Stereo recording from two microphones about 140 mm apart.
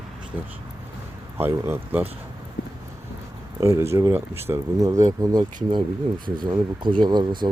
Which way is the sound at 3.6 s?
20° right (ahead or behind).